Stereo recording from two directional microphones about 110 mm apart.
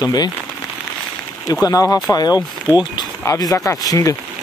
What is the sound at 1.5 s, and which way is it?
Speech, 30° left (ahead or behind).